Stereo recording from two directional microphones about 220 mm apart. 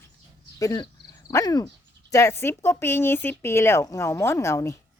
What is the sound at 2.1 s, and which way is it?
Speech, 15° left (ahead or behind).